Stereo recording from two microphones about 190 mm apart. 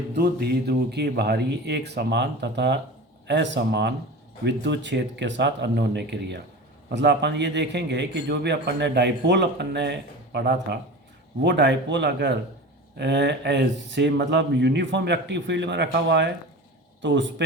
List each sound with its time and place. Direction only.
0.1 s a man's voice: 55° right (ahead or behind)